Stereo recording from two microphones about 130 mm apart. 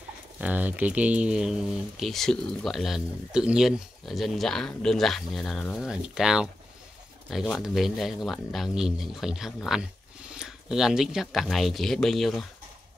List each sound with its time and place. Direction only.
0.4 s speech: 10° right (ahead or behind)